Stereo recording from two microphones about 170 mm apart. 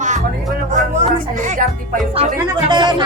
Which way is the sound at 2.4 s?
25° right (ahead or behind).